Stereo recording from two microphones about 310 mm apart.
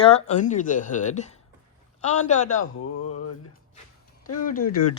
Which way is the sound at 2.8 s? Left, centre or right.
Left.